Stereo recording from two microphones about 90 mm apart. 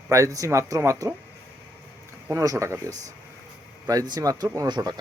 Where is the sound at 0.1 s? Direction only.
40° right (ahead or behind).